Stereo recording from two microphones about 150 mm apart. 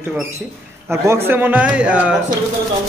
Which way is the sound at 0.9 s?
15° right (ahead or behind).